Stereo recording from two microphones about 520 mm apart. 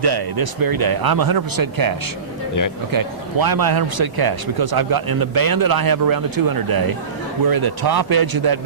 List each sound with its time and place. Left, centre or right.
0.0 s a man's voice: right